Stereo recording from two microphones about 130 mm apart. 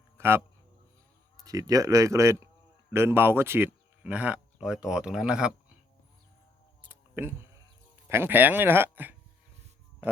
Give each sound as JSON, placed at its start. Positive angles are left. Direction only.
{"t": 0.2, "sound": "speech", "side_deg": -15}
{"t": 6.8, "sound": "a sound", "side_deg": -15}
{"t": 8.0, "sound": "speech", "side_deg": -15}